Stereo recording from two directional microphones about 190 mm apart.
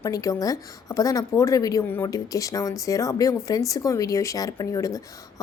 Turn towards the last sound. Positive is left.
turn(degrees=15)  # may be behind; listen again after turning